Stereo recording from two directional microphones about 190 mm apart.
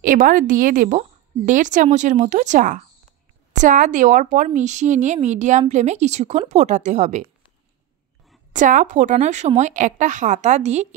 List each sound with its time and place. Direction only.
0.0 s a woman's voice: 45° right (ahead or behind)
8.5 s a woman's voice: 45° right (ahead or behind)